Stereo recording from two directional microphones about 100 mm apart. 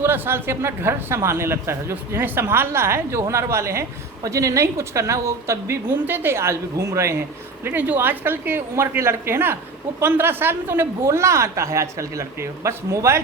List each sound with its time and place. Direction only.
0.0 s speech: 20° right (ahead or behind)